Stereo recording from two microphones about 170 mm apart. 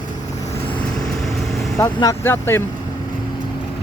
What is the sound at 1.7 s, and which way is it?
Speech, 20° left (ahead or behind).